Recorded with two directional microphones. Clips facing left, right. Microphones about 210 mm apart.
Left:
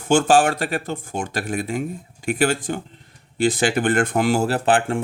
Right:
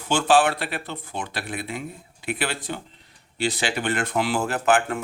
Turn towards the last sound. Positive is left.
turn(degrees=30)  # may be behind; listen again after turning